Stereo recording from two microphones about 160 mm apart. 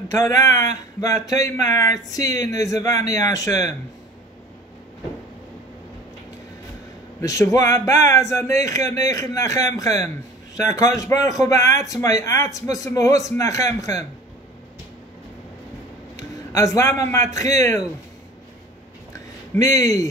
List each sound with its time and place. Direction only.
0.1 s a man's voice: 20° left (ahead or behind)
7.2 s a man's voice: 20° left (ahead or behind)
16.2 s a man's voice: 20° left (ahead or behind)
19.1 s a sound: 20° left (ahead or behind)